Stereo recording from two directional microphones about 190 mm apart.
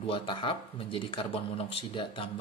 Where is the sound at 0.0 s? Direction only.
25° left (ahead or behind).